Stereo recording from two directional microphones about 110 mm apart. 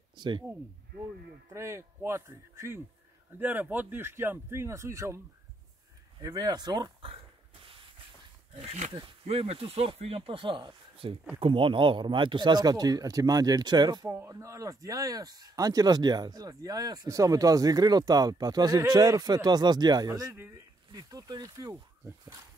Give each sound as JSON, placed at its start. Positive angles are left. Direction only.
{"t": 0.1, "sound": "speech", "side_deg": -45}
{"t": 1.5, "sound": "speech", "side_deg": -25}
{"t": 6.2, "sound": "speech", "side_deg": -40}
{"t": 8.5, "sound": "speech", "side_deg": -75}
{"t": 8.9, "sound": "speech", "side_deg": -60}
{"t": 14.0, "sound": "speech", "side_deg": -25}
{"t": 20.3, "sound": "speech", "side_deg": -25}